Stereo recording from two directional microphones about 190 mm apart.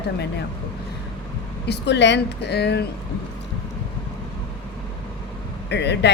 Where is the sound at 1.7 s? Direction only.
65° left (ahead or behind).